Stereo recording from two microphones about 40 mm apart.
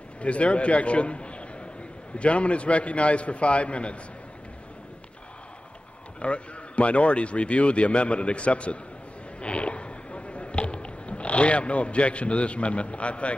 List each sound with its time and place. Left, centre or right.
0.2 s a man's voice: left
6.2 s a man's voice: left
9.4 s a sound: left